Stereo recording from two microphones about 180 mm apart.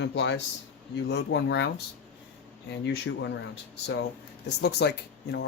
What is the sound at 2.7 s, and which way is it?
Speech, 75° left (ahead or behind).